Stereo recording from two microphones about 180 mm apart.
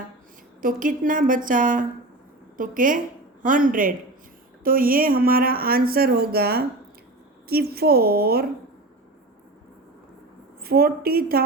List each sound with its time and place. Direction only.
0.6 s a woman's voice: 50° right (ahead or behind)
10.6 s speech: 55° right (ahead or behind)